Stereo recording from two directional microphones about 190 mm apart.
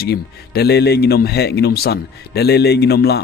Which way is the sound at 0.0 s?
55° left (ahead or behind).